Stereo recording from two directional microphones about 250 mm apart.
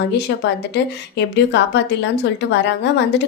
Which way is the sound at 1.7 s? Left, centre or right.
Left.